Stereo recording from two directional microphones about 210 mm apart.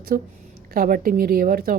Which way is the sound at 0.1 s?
45° right (ahead or behind).